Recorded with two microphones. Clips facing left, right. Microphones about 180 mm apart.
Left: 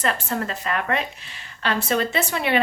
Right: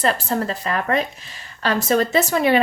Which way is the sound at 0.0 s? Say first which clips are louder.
Right 4 dB; 35° right (ahead or behind).